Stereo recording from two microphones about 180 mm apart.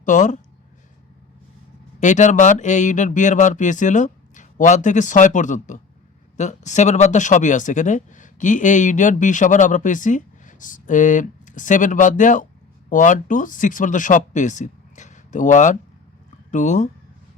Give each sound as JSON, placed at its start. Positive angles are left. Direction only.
{"t": 0.0, "sound": "speech", "side_deg": 45}
{"t": 2.0, "sound": "speech", "side_deg": 40}